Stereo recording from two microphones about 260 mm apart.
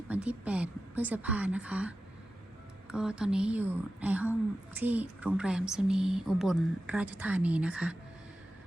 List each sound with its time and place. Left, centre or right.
0.1 s speech: centre